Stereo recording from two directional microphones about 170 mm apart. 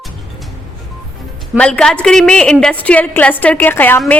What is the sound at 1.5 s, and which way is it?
A woman's voice, 5° left (ahead or behind).